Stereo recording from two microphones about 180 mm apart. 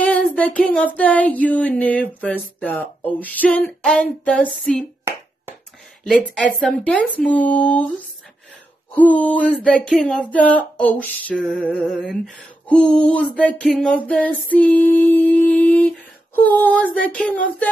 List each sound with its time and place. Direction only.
0.0 s speech: 10° left (ahead or behind)
6.0 s speech: 5° left (ahead or behind)
8.9 s speech: 10° left (ahead or behind)